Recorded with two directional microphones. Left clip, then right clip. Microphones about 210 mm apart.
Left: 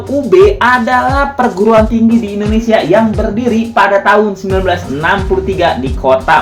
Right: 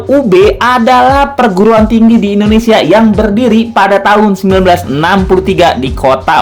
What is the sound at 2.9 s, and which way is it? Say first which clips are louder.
Speech: right 3 dB; 60° right (ahead or behind).